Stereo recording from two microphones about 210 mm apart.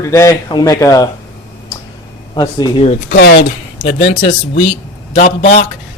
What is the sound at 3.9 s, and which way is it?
Speech, 65° left (ahead or behind).